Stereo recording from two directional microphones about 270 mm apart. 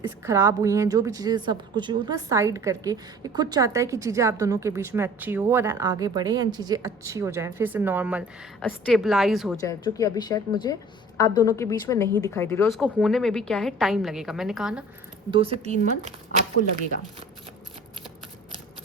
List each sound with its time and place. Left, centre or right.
0.3 s a woman's voice: centre
9.6 s speech: centre
12.7 s a woman's voice: centre
15.3 s speech: right